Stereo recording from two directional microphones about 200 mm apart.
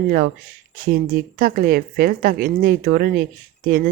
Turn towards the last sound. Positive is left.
turn(degrees=-45)  # may be behind; listen again after turning